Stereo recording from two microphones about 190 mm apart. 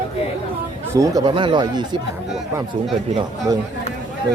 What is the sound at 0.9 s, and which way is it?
Speech, 20° right (ahead or behind).